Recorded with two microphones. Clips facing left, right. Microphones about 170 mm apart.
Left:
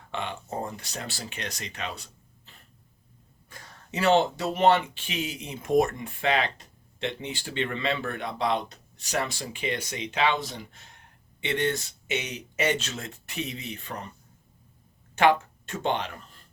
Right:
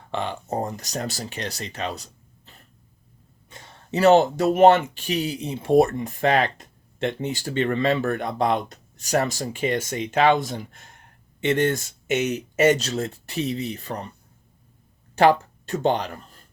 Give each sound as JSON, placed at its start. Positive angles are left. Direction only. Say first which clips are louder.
{"t": 0.1, "sound": "speech", "louder": "right 6 dB", "side_deg": -35}
{"t": 3.5, "sound": "a sound", "louder": "right 2 dB", "side_deg": -25}
{"t": 3.9, "sound": "speech", "louder": "right 6 dB", "side_deg": -40}
{"t": 15.1, "sound": "speech", "louder": "right 4 dB", "side_deg": -35}